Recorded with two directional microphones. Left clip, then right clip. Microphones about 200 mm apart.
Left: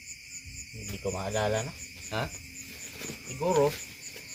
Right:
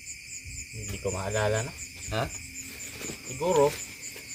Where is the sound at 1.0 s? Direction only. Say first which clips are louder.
Right 2 dB; 25° right (ahead or behind).